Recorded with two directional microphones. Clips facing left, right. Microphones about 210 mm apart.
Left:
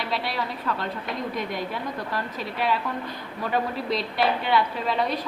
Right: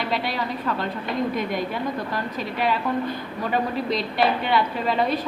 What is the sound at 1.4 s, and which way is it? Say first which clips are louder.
A woman's voice: right 4 dB; centre (ahead or behind).